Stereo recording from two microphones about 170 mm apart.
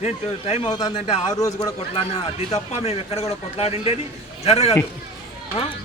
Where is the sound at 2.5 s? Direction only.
35° left (ahead or behind).